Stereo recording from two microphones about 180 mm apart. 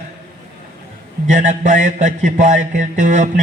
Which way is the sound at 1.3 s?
40° right (ahead or behind).